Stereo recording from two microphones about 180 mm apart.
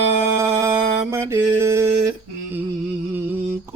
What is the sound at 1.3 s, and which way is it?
Music, 15° right (ahead or behind).